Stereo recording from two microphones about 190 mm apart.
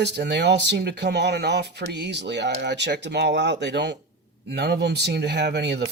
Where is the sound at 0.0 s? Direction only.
65° right (ahead or behind).